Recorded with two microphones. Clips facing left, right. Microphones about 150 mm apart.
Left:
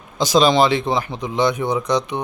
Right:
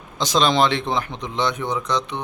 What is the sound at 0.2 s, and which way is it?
Speech, 5° left (ahead or behind).